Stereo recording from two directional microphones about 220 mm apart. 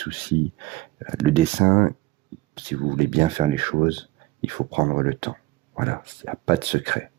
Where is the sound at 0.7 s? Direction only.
25° right (ahead or behind).